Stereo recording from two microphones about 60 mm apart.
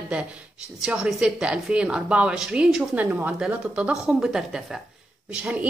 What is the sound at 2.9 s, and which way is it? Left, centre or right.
A woman's voice, right.